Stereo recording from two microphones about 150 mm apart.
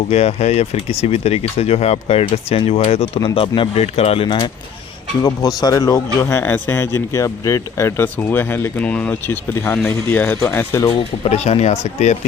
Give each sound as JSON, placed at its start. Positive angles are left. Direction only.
{"t": 0.1, "sound": "speech", "side_deg": 45}
{"t": 5.2, "sound": "a man's voice", "side_deg": 25}
{"t": 11.2, "sound": "speech", "side_deg": 45}